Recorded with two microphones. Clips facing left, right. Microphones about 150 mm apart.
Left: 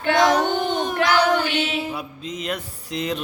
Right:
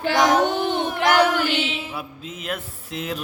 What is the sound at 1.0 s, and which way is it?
Child singing, 55° right (ahead or behind).